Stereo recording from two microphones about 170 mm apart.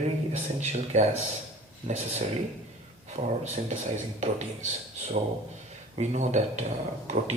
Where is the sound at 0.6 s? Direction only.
40° right (ahead or behind).